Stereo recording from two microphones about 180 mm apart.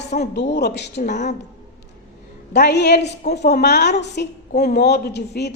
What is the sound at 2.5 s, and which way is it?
A woman's voice, 65° left (ahead or behind).